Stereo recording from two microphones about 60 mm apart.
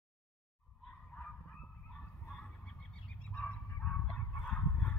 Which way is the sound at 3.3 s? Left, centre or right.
Centre.